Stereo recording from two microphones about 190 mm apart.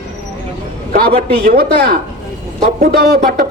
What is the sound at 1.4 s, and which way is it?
A man's voice, 55° right (ahead or behind).